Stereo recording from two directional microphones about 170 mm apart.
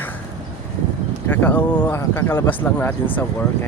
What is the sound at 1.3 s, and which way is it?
Speech, 10° left (ahead or behind).